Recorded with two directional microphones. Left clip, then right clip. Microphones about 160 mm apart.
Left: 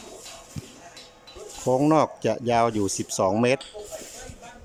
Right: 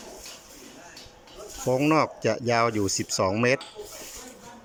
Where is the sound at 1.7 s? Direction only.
20° left (ahead or behind).